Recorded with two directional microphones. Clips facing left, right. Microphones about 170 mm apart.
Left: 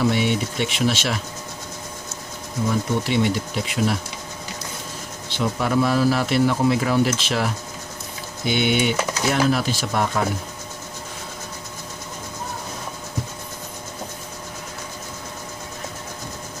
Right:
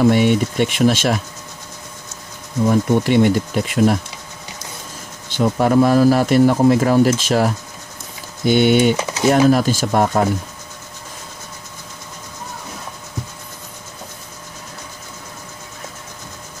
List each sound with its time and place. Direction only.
0.0 s a man's voice: 50° right (ahead or behind)
2.7 s a man's voice: 50° right (ahead or behind)
5.3 s a man's voice: 45° right (ahead or behind)